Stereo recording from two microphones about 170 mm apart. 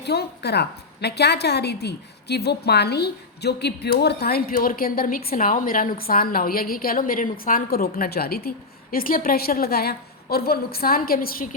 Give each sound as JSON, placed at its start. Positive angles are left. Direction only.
{"t": 0.0, "sound": "a woman's voice", "side_deg": 75}